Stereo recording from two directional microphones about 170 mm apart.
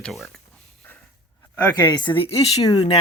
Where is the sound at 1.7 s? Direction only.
20° left (ahead or behind).